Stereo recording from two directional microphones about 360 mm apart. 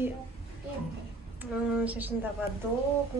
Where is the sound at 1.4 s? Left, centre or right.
Centre.